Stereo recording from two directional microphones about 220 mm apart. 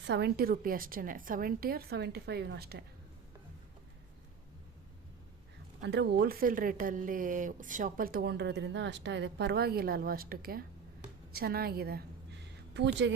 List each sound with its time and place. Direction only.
0.0 s speech: 50° right (ahead or behind)
5.8 s speech: 50° right (ahead or behind)